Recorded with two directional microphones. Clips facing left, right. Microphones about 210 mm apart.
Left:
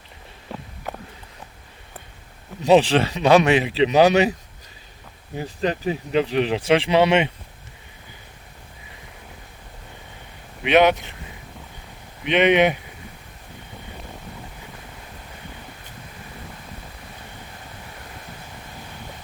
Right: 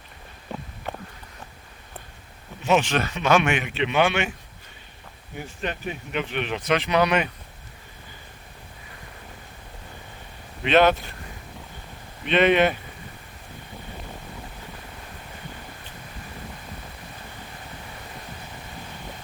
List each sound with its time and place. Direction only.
2.6 s speech: 35° left (ahead or behind)
5.4 s speech: 35° left (ahead or behind)
10.7 s speech: 15° left (ahead or behind)
12.2 s speech: 15° left (ahead or behind)